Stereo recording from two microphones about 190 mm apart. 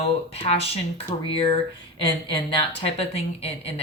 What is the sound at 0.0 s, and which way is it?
Speech, 30° left (ahead or behind).